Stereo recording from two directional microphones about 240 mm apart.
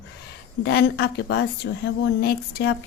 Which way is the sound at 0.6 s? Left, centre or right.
Left.